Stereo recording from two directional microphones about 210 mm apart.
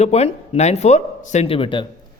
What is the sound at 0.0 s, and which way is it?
Speech, 30° left (ahead or behind).